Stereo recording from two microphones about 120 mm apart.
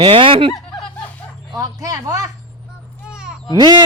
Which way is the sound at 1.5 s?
30° right (ahead or behind).